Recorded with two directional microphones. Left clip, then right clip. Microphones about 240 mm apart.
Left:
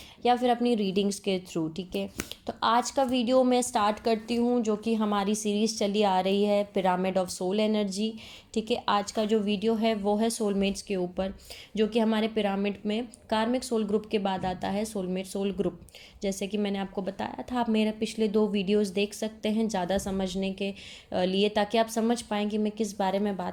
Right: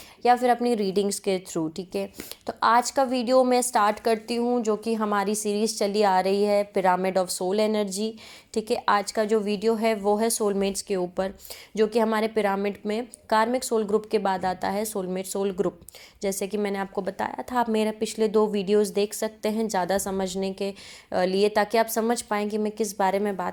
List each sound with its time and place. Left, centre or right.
0.2 s a woman's voice: right